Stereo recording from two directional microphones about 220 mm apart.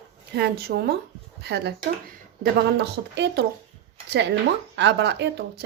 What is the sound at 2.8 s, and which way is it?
Speech, 50° right (ahead or behind).